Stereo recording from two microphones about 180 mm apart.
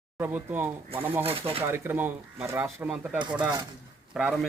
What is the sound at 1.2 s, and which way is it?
Speech, 30° right (ahead or behind).